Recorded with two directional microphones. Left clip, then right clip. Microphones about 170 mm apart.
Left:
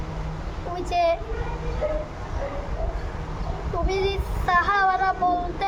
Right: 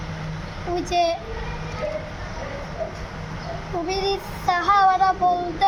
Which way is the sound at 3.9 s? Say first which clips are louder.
Right 2 dB; 25° left (ahead or behind).